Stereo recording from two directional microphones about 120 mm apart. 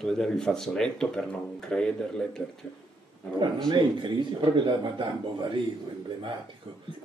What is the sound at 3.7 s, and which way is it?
A man's voice, 40° right (ahead or behind).